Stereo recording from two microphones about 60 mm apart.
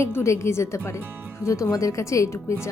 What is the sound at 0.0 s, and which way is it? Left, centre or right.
Speech, left.